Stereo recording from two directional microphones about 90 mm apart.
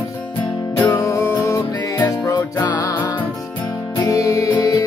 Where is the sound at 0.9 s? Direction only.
30° left (ahead or behind).